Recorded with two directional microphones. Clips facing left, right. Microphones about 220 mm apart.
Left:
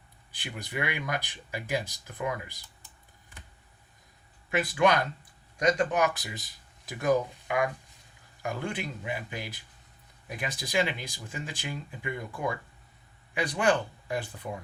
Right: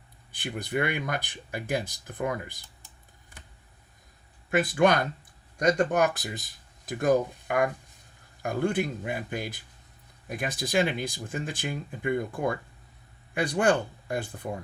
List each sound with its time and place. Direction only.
0.3 s speech: 50° right (ahead or behind)
4.4 s speech: 50° right (ahead or behind)